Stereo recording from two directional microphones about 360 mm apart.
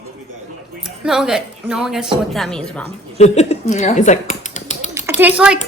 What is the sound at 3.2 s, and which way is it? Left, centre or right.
Speech, centre.